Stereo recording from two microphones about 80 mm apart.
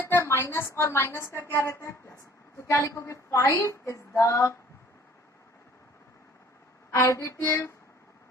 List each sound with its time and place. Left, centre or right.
0.0 s a sound: left
0.7 s a woman's voice: left
6.9 s a woman's voice: left